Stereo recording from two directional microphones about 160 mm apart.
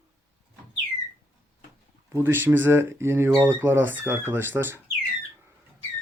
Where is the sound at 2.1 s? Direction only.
15° right (ahead or behind).